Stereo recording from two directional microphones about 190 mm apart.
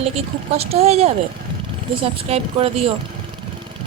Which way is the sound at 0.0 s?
30° right (ahead or behind).